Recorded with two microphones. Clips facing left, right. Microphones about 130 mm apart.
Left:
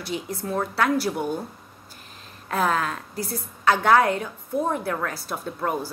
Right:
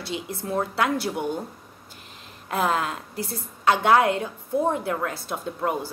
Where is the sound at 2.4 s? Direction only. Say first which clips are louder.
Left 1 dB; 20° right (ahead or behind).